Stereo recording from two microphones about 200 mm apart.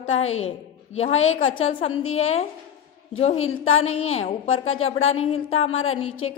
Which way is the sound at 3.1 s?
30° left (ahead or behind).